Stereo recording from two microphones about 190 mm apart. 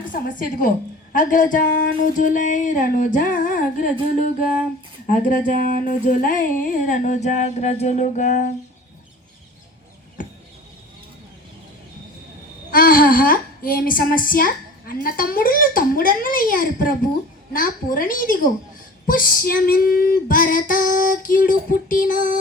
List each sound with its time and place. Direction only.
0.1 s a woman's voice: 45° left (ahead or behind)
5.0 s a woman's voice: 45° left (ahead or behind)
5.5 s a sound: 45° left (ahead or behind)
12.7 s a woman's voice: 50° left (ahead or behind)